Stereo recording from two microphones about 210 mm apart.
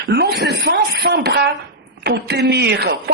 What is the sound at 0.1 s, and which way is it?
A woman's voice, 50° right (ahead or behind).